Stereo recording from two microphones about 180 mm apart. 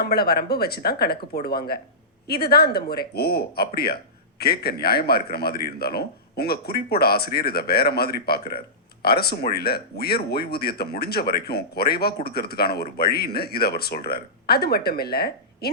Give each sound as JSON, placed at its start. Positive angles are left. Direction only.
{"t": 0.0, "sound": "speech", "side_deg": 60}